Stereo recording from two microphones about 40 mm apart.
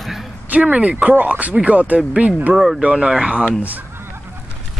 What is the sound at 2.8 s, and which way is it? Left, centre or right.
Speech, right.